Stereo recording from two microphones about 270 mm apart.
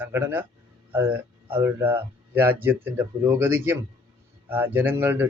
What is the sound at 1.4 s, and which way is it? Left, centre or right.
Speech, centre.